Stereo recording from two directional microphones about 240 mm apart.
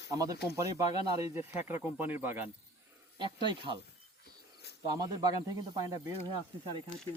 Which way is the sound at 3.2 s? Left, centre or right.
Centre.